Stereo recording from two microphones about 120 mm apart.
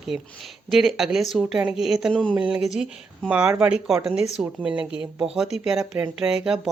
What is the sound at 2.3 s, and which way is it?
Speech, 5° right (ahead or behind).